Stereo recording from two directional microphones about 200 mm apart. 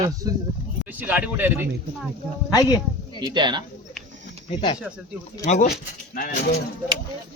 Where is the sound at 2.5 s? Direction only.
20° left (ahead or behind).